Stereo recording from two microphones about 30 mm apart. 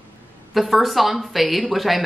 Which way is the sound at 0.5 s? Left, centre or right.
Centre.